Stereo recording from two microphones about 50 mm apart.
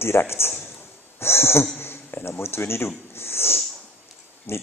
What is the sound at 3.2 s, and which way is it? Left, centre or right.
Snort, left.